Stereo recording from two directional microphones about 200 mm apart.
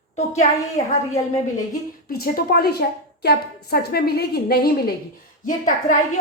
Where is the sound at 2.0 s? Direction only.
50° left (ahead or behind).